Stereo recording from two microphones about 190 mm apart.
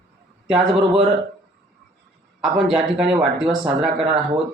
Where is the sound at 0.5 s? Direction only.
30° right (ahead or behind).